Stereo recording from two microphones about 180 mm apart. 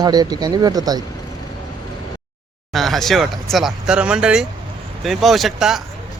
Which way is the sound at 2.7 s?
Centre (ahead or behind).